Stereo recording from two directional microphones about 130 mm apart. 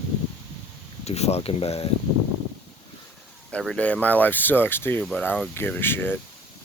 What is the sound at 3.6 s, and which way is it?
Speech, 5° left (ahead or behind).